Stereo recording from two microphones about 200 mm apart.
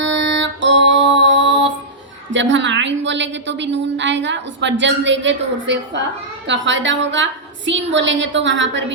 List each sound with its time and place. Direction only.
0.0 s music: 65° right (ahead or behind)
2.3 s a woman's voice: 65° right (ahead or behind)